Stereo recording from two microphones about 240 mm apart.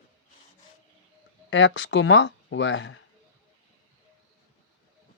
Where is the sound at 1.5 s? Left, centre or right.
Left.